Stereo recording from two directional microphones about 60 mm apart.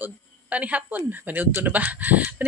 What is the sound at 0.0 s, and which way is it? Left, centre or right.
Speech, right.